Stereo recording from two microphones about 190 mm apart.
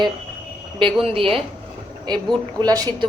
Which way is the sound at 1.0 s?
30° right (ahead or behind).